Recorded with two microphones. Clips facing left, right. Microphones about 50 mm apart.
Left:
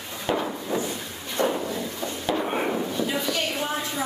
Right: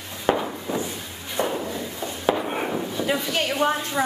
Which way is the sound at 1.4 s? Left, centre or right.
Centre.